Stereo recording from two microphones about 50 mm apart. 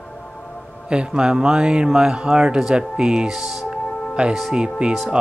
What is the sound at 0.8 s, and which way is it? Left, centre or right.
Speech, centre.